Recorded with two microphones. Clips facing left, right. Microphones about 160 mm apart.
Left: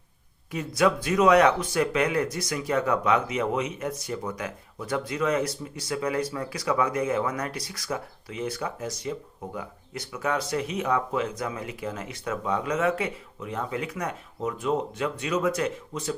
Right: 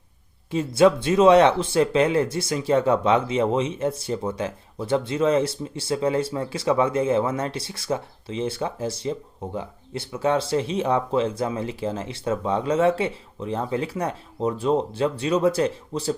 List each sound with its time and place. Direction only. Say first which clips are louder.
0.5 s speech: right 6 dB; 25° right (ahead or behind)